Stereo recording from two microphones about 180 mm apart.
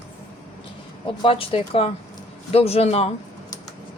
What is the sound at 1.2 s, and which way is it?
Speech, 30° left (ahead or behind).